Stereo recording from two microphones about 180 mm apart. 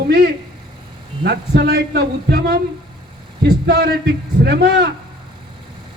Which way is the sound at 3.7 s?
60° right (ahead or behind).